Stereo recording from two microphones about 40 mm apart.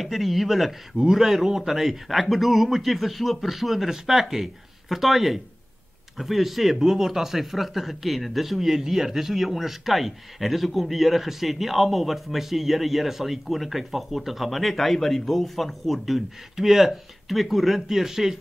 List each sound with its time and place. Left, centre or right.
0.0 s speech: centre
0.9 s speech: centre